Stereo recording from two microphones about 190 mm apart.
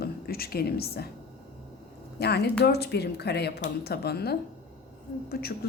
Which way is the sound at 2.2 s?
60° left (ahead or behind).